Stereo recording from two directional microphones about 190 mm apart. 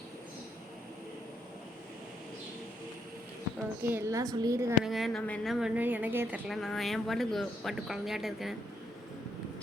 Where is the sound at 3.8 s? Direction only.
10° right (ahead or behind).